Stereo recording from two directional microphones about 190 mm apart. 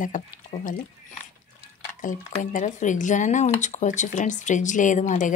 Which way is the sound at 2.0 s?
45° left (ahead or behind).